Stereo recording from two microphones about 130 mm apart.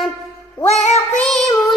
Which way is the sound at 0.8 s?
60° left (ahead or behind).